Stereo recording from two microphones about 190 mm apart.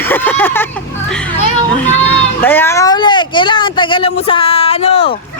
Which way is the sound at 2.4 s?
10° left (ahead or behind).